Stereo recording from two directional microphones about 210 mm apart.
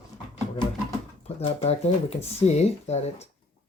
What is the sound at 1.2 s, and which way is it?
Speech, 30° left (ahead or behind).